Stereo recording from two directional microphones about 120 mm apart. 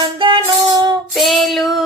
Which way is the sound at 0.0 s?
40° right (ahead or behind).